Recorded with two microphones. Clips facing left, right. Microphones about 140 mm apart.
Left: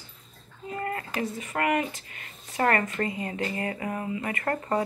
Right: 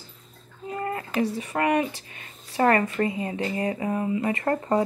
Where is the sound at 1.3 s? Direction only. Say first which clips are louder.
Left 1 dB; 35° right (ahead or behind).